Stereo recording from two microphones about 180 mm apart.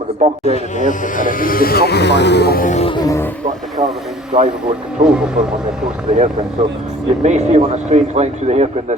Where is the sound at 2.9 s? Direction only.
20° left (ahead or behind).